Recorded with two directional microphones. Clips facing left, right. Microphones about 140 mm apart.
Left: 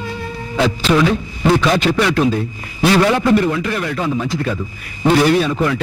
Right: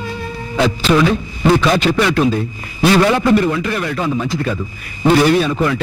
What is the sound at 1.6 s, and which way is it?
A man's voice, 15° right (ahead or behind).